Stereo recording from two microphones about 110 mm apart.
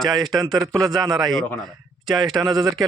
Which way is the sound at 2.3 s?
25° right (ahead or behind).